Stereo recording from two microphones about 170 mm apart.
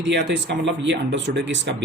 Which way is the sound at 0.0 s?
90° right.